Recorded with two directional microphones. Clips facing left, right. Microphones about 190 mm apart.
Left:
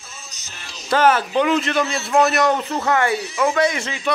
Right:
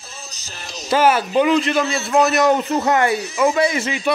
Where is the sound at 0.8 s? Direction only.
10° right (ahead or behind).